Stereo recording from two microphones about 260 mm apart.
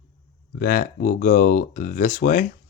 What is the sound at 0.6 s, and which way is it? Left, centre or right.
Speech, left.